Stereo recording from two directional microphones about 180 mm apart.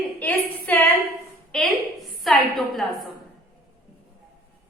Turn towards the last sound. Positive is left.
turn(degrees=0)  # may be behind; listen again after turning